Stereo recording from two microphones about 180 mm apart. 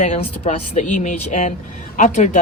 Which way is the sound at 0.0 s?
40° left (ahead or behind).